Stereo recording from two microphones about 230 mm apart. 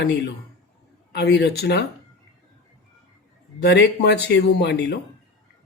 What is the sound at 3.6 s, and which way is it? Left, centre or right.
Speech, left.